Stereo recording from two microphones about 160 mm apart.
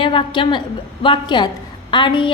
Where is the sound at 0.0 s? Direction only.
30° left (ahead or behind).